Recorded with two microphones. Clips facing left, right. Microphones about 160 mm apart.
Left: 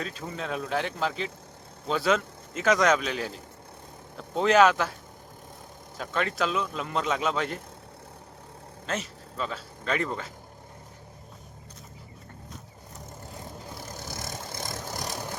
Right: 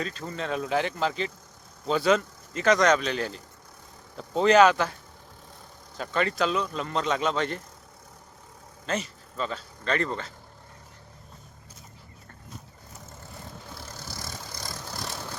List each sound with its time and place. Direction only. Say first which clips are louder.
0.0 s speech: right 2 dB; 5° left (ahead or behind)
6.0 s speech: right 2 dB; centre (ahead or behind)
8.9 s speech: right 2 dB; centre (ahead or behind)
13.7 s vehicle: left 3 dB; 20° left (ahead or behind)